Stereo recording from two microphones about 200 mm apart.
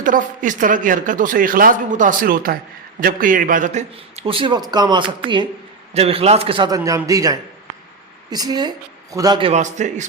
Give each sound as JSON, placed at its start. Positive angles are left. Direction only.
{"t": 0.0, "sound": "a man's voice", "side_deg": -40}
{"t": 9.5, "sound": "speech", "side_deg": -35}